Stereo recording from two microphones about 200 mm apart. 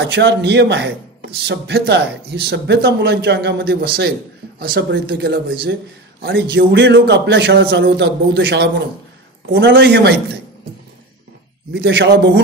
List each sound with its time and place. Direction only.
0.0 s a man's voice: 60° right (ahead or behind)
11.7 s a man's voice: 55° right (ahead or behind)